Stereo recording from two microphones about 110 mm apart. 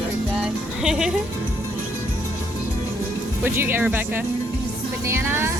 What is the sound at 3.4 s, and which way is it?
Speech, 20° right (ahead or behind).